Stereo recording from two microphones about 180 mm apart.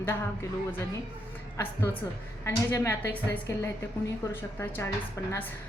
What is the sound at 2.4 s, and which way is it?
A woman's voice, 15° left (ahead or behind).